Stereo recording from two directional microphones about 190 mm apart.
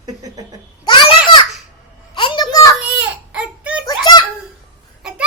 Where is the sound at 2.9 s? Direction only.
5° right (ahead or behind).